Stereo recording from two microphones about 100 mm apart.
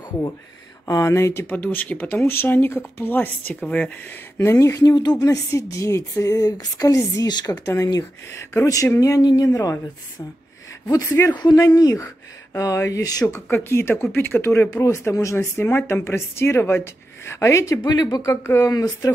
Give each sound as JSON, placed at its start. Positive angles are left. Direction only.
{"t": 0.8, "sound": "speech", "side_deg": 30}
{"t": 4.6, "sound": "a woman's voice", "side_deg": 35}
{"t": 10.9, "sound": "a woman's voice", "side_deg": 35}
{"t": 13.5, "sound": "a woman's voice", "side_deg": 25}